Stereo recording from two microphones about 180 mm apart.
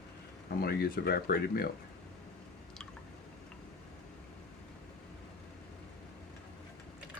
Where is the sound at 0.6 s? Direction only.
55° left (ahead or behind).